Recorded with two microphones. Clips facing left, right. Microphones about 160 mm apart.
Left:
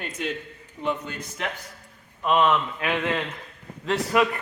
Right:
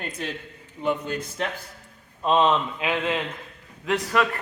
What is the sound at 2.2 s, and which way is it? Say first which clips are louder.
Speech: right 1 dB; 25° right (ahead or behind).